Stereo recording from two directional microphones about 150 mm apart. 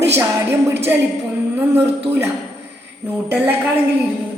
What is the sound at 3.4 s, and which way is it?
Speech, 10° right (ahead or behind).